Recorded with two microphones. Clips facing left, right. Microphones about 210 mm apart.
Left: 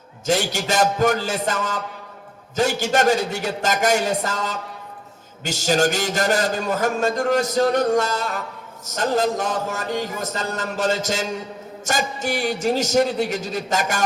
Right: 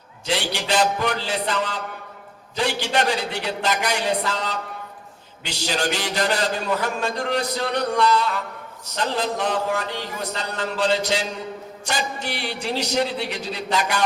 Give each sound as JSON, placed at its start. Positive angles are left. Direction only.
{"t": 0.3, "sound": "a man's voice", "side_deg": 45}